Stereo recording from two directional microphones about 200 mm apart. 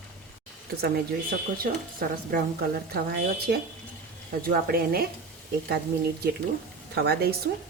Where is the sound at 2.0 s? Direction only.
50° right (ahead or behind).